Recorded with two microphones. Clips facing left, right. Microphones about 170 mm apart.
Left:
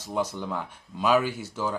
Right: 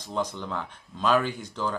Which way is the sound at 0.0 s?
10° left (ahead or behind).